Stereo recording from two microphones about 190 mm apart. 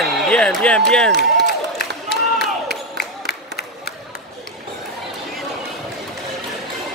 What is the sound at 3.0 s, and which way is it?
Crowd, 55° left (ahead or behind).